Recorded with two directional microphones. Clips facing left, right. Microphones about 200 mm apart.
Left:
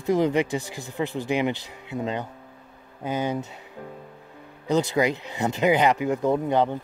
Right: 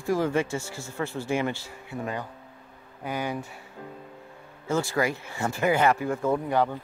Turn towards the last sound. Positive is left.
turn(degrees=20)  # may be behind; listen again after turning